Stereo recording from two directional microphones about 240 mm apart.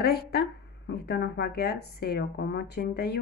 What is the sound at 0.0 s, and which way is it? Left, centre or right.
A woman's voice, left.